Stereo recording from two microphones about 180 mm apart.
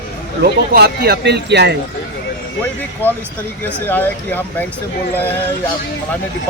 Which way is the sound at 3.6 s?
10° left (ahead or behind).